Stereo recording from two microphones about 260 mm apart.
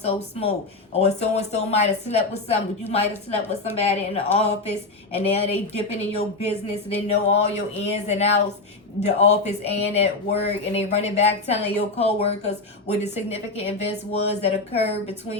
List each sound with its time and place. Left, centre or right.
0.0 s a woman's voice: left